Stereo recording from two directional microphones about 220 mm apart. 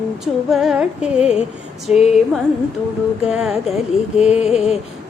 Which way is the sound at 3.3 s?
Centre (ahead or behind).